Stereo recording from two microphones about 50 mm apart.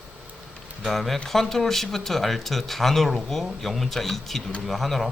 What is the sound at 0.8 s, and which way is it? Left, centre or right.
Speech, centre.